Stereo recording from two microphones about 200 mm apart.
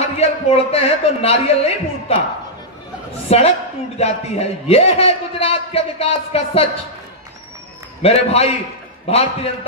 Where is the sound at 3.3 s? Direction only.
30° left (ahead or behind).